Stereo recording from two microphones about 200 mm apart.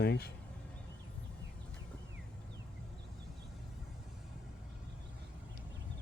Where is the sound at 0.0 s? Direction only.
50° left (ahead or behind).